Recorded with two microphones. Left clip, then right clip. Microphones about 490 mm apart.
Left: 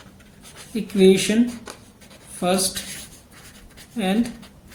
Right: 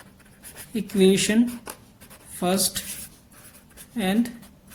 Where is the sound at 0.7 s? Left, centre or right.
Right.